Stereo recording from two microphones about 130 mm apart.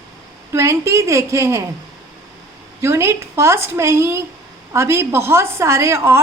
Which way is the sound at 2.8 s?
20° right (ahead or behind).